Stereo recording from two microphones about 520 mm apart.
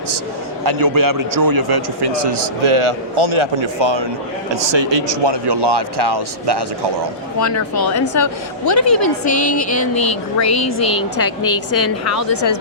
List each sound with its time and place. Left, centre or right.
0.6 s a man's voice: right
2.6 s a man's voice: right
7.3 s a woman's voice: left
11.2 s a woman's voice: left